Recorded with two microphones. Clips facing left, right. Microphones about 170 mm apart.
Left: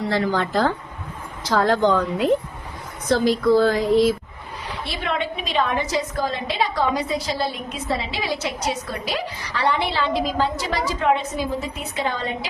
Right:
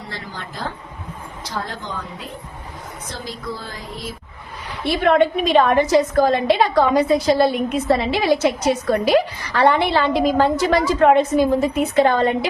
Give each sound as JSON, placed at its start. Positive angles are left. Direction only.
{"t": 0.1, "sound": "speech", "side_deg": 90}
{"t": 4.9, "sound": "a woman's voice", "side_deg": -55}